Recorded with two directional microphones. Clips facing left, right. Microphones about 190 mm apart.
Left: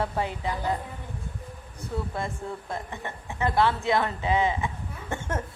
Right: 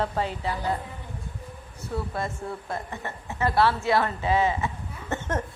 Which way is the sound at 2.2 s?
15° left (ahead or behind).